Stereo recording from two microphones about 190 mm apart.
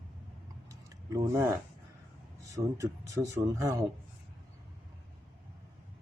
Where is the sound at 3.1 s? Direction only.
15° right (ahead or behind).